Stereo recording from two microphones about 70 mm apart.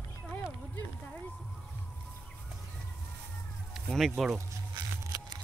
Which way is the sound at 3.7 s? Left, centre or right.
Centre.